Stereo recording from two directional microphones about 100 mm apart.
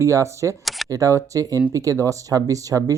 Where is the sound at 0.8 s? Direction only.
35° right (ahead or behind).